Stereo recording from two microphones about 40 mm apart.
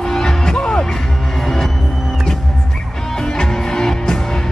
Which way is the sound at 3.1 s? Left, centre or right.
Centre.